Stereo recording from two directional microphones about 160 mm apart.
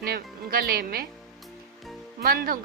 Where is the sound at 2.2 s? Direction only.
65° right (ahead or behind).